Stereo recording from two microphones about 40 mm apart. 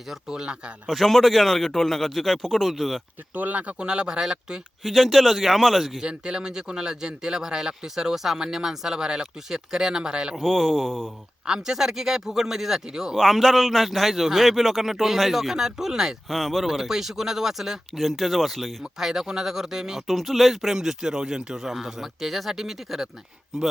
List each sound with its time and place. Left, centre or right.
0.3 s speech: centre
0.9 s a man's voice: centre
3.3 s speech: right
3.8 s speech: right
4.8 s a man's voice: centre
6.0 s speech: centre
10.4 s a man's voice: centre
11.4 s speech: centre
13.1 s a man's voice: centre
16.3 s a man's voice: centre
16.6 s a man's voice: centre
18.9 s speech: centre
20.1 s speech: centre